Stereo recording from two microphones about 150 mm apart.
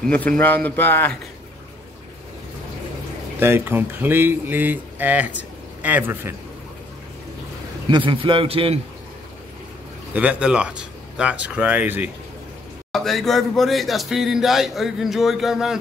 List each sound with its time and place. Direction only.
0.0 s speech: 5° left (ahead or behind)
3.3 s a man's voice: 15° right (ahead or behind)
7.9 s a man's voice: 35° right (ahead or behind)
10.1 s speech: 10° right (ahead or behind)
12.9 s speech: centre (ahead or behind)